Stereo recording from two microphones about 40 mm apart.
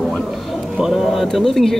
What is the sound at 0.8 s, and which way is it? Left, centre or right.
Speech, centre.